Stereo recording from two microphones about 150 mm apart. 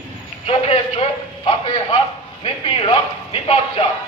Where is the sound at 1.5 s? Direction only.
35° left (ahead or behind).